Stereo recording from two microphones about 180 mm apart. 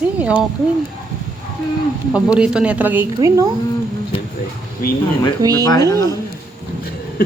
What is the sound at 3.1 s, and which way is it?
Speech, 20° right (ahead or behind).